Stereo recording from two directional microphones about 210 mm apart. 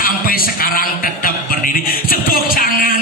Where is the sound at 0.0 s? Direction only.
45° left (ahead or behind).